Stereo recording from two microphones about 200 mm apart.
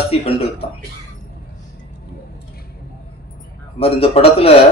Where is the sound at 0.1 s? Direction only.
30° left (ahead or behind).